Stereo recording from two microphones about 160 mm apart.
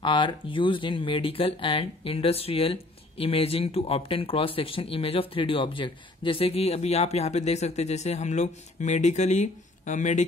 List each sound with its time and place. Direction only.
0.0 s speech: 30° left (ahead or behind); by 10.2 s 50° left (ahead or behind)